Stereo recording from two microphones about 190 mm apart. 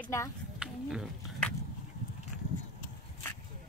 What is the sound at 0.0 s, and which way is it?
Speech, 15° left (ahead or behind).